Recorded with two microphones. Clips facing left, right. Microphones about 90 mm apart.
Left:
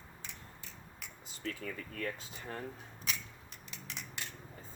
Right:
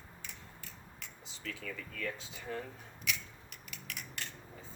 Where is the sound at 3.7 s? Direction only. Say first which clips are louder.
Even; 25° left (ahead or behind).